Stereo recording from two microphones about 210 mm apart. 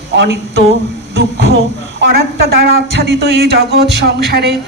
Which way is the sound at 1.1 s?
50° right (ahead or behind).